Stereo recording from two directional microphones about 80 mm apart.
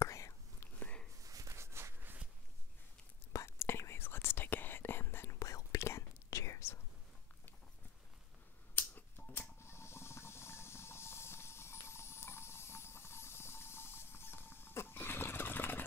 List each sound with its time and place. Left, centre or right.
0.0 s whispering: left
0.7 s a sound: centre
1.2 s walk: right
3.4 s whispering: left
5.4 s whispering: left
8.7 s a sound: left